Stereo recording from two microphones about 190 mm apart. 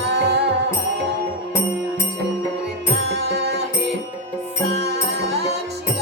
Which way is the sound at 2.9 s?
60° right (ahead or behind).